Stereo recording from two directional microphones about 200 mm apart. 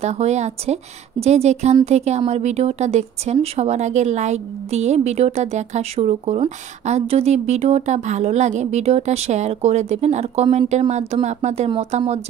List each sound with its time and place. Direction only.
0.0 s speech: 35° right (ahead or behind)